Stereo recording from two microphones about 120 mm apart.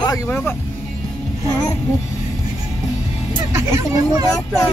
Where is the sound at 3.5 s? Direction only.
25° right (ahead or behind).